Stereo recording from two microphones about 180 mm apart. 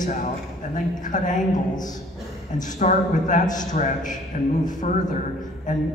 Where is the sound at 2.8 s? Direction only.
45° left (ahead or behind).